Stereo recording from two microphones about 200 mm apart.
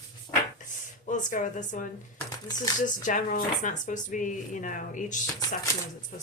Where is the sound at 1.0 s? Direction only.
40° left (ahead or behind).